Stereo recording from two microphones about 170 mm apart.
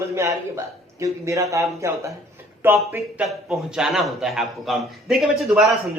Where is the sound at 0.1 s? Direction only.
15° right (ahead or behind).